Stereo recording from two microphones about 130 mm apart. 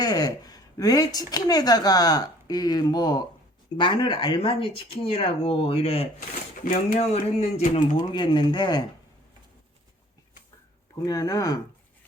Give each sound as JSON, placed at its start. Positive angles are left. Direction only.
{"t": 0.0, "sound": "speech", "side_deg": 30}
{"t": 6.7, "sound": "speech", "side_deg": 65}
{"t": 7.8, "sound": "speech", "side_deg": 35}
{"t": 10.9, "sound": "speech", "side_deg": 25}